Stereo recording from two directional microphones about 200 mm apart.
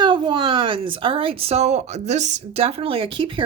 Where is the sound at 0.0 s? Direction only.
25° right (ahead or behind).